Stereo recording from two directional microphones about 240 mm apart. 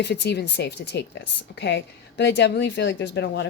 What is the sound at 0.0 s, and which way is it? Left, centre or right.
Speech, left.